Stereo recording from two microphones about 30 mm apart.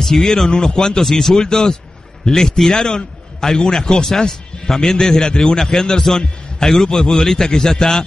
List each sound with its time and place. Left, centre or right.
0.0 s a man's voice: centre